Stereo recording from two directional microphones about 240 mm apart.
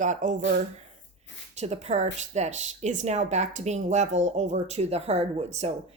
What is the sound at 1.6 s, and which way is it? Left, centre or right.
Speech, right.